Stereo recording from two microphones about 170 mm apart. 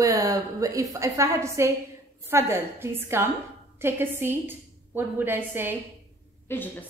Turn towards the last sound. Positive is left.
turn(degrees=15)  # may be behind; listen again after turning